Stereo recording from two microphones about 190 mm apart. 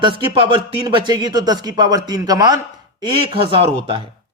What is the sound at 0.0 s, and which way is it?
Speech, 25° right (ahead or behind).